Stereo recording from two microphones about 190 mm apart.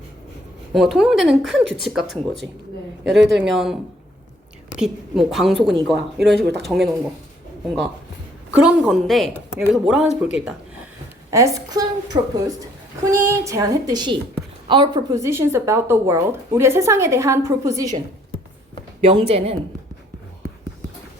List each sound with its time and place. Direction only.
0.7 s speech: centre (ahead or behind)
3.1 s a woman's voice: 70° right (ahead or behind)
3.4 s speech: centre (ahead or behind)
4.8 s speech: centre (ahead or behind)
8.5 s speech: 5° right (ahead or behind)
11.3 s a woman's voice: 15° right (ahead or behind)
19.0 s speech: 30° right (ahead or behind)